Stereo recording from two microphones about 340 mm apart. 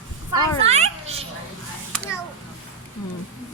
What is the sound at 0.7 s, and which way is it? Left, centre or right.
Children playing, centre.